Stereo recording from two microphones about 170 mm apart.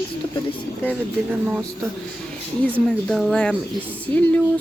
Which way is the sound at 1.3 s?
10° right (ahead or behind).